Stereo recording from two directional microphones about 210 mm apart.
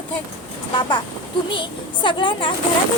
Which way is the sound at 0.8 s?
20° left (ahead or behind).